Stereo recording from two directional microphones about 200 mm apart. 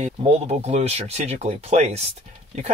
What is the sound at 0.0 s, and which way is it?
Speech, 35° right (ahead or behind).